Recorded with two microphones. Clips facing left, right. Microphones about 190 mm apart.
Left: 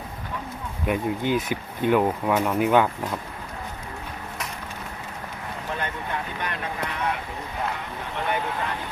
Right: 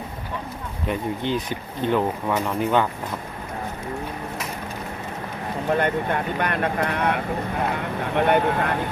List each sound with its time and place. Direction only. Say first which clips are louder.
0.9 s speech: left 1 dB; 10° left (ahead or behind)
5.6 s speech: right 10 dB; 55° right (ahead or behind)